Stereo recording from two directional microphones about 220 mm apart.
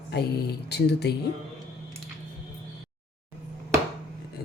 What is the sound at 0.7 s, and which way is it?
Speech, 50° left (ahead or behind).